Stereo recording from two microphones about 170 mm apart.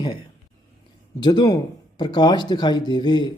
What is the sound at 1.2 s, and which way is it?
Speech, 25° left (ahead or behind).